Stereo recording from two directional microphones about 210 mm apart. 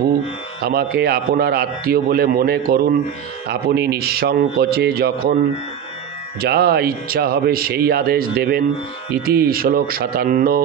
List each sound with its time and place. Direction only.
0.7 s a man's voice: 50° right (ahead or behind)
6.4 s a man's voice: 50° right (ahead or behind)